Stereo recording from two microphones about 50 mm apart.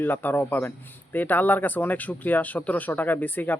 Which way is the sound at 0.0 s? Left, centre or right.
Left.